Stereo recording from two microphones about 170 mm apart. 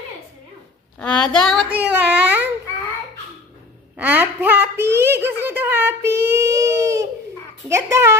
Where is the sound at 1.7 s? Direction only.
10° right (ahead or behind).